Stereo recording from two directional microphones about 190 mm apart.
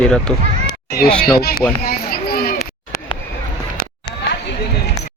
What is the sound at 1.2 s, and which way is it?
Speech, 55° left (ahead or behind).